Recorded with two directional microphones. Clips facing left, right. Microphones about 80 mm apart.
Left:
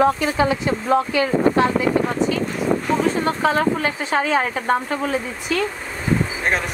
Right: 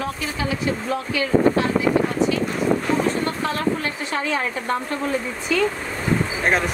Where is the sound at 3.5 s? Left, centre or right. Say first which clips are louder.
Left 4 dB; centre.